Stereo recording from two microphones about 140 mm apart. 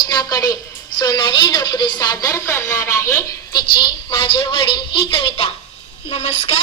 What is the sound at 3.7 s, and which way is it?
A woman's voice, 35° left (ahead or behind).